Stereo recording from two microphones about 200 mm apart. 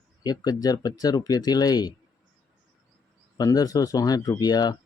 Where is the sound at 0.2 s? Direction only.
20° left (ahead or behind).